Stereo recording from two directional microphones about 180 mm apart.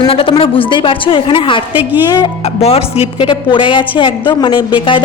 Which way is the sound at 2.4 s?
35° left (ahead or behind).